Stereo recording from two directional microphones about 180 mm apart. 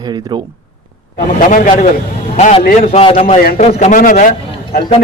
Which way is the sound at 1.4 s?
45° left (ahead or behind).